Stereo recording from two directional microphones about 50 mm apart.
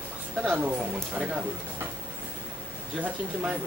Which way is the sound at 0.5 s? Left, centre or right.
Right.